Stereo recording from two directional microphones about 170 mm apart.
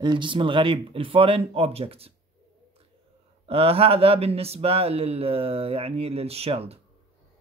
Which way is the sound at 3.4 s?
35° right (ahead or behind).